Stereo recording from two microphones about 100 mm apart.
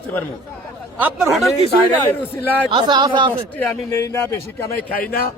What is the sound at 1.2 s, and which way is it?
Speech, centre (ahead or behind).